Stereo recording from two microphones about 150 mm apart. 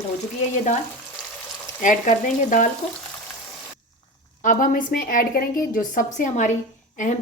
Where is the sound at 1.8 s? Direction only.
60° left (ahead or behind).